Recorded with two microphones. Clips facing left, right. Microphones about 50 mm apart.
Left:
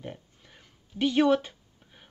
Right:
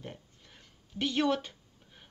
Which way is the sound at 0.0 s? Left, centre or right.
Centre.